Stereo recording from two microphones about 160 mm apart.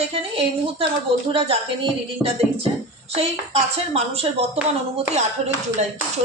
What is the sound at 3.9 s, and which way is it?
A woman's voice, 40° right (ahead or behind).